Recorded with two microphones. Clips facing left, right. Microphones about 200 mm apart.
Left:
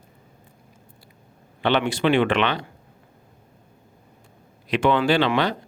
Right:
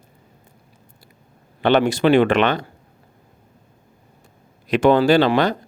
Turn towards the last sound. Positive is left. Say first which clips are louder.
# right 5 dB
turn(degrees=-45)  # may be behind; listen again after turning